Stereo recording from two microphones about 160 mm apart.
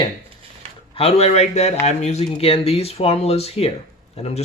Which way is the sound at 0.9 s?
40° left (ahead or behind).